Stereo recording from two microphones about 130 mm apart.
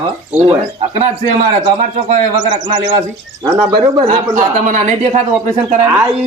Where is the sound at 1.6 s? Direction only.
70° right (ahead or behind).